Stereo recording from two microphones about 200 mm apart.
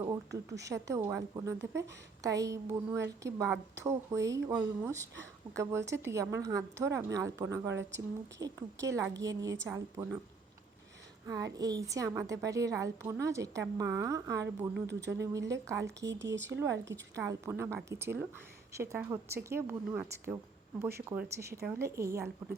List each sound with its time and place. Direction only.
0.6 s a woman's voice: 15° right (ahead or behind)
11.3 s a woman's voice: 15° right (ahead or behind)
14.7 s speech: 60° right (ahead or behind)
15.2 s a woman's voice: 15° right (ahead or behind)
16.0 s speech: 65° right (ahead or behind)
16.5 s a woman's voice: 15° right (ahead or behind)